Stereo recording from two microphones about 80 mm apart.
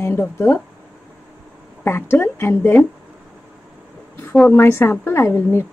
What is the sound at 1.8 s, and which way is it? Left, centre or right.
A woman's voice, left.